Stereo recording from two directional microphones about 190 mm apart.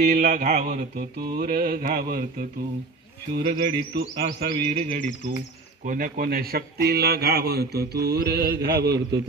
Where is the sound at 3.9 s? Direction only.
55° right (ahead or behind).